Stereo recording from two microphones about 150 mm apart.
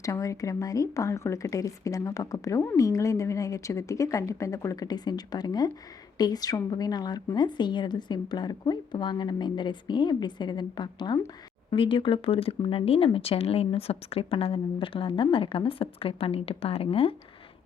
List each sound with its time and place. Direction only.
0.0 s speech: 20° left (ahead or behind); by 17.2 s 40° left (ahead or behind)